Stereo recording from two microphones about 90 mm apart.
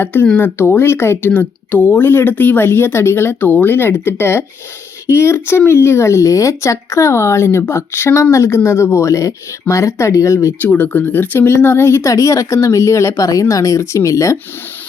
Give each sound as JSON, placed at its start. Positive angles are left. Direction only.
{"t": 0.0, "sound": "speech", "side_deg": 25}
{"t": 10.6, "sound": "speech", "side_deg": 20}